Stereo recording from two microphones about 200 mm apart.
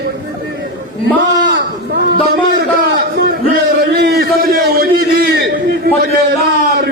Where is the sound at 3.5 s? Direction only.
50° right (ahead or behind).